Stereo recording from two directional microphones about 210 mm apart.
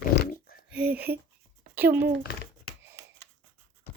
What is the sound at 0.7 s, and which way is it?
Speech, 5° right (ahead or behind).